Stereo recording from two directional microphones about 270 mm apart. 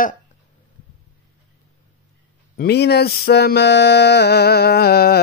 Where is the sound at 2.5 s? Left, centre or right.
Left.